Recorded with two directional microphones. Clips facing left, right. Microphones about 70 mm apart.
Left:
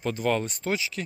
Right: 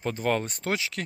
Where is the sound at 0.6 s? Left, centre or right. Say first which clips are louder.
Left 1 dB; right.